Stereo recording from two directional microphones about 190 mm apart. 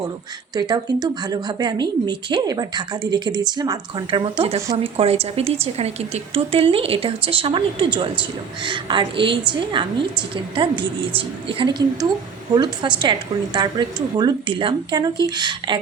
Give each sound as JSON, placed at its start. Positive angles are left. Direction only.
{"t": 0.5, "sound": "a woman's voice", "side_deg": -20}